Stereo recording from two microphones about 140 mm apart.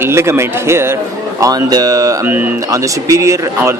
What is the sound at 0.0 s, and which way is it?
Speech, 20° right (ahead or behind).